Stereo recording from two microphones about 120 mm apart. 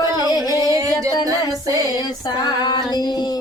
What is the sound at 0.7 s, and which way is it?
Music, 25° right (ahead or behind).